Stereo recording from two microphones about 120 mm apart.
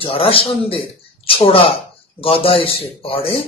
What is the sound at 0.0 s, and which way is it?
Speech, 50° left (ahead or behind).